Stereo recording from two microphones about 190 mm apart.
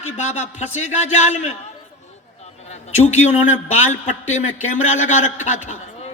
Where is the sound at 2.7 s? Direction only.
35° left (ahead or behind).